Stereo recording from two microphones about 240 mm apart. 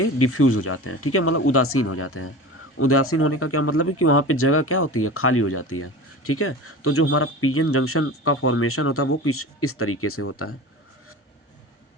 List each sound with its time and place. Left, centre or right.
0.0 s speech: left